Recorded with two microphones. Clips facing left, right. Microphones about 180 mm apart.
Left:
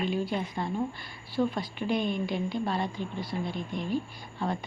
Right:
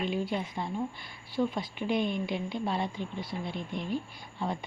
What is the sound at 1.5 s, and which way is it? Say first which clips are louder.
Speech: left 1 dB; 20° right (ahead or behind).